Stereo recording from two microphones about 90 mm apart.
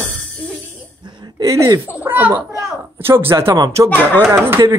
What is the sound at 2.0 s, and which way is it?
A man's voice, 20° right (ahead or behind).